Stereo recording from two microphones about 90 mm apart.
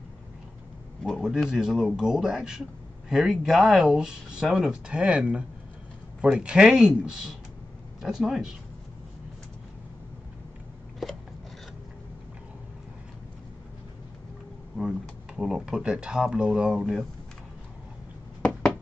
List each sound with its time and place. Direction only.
1.0 s a man's voice: 5° right (ahead or behind)
11.0 s biting: centre (ahead or behind)
14.8 s speech: 5° right (ahead or behind)